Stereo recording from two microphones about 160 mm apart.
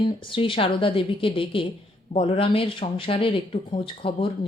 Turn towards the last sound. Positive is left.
turn(degrees=35)  # may be behind; listen again after turning